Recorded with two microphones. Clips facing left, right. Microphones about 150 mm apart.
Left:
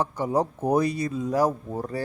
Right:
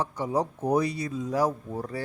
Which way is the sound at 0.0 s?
50° left (ahead or behind).